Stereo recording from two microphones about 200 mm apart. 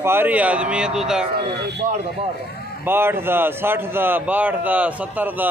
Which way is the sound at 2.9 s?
10° right (ahead or behind).